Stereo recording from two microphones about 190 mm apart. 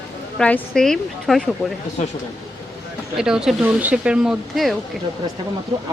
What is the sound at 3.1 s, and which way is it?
Speech, 5° right (ahead or behind).